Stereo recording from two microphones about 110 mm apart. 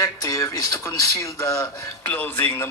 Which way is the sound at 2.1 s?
15° left (ahead or behind).